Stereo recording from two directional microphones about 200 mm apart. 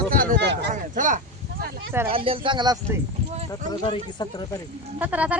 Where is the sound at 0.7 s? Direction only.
40° right (ahead or behind).